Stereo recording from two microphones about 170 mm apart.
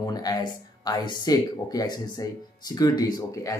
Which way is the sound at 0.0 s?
25° left (ahead or behind).